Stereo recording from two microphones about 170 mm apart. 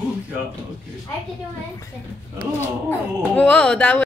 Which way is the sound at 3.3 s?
5° left (ahead or behind).